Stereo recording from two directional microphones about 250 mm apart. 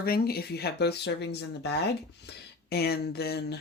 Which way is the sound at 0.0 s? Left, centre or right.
Left.